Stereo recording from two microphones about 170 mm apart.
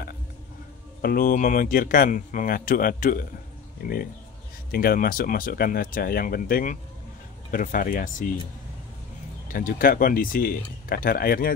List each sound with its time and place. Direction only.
1.0 s speech: 55° left (ahead or behind)
9.5 s speech: 55° left (ahead or behind)